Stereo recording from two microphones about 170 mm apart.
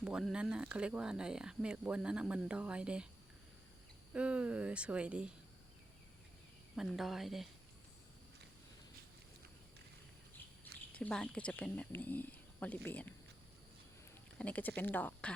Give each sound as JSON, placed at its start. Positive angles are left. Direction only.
{"t": 0.0, "sound": "speech", "side_deg": -5}
{"t": 4.1, "sound": "speech", "side_deg": -5}
{"t": 6.7, "sound": "speech", "side_deg": 0}
{"t": 10.9, "sound": "speech", "side_deg": 5}
{"t": 14.3, "sound": "speech", "side_deg": 10}